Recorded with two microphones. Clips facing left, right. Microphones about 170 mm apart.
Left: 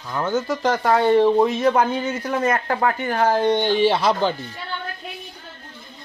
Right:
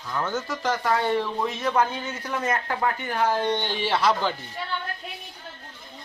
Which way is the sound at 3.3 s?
45° left (ahead or behind).